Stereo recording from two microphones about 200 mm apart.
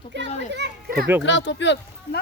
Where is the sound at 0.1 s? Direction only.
60° right (ahead or behind).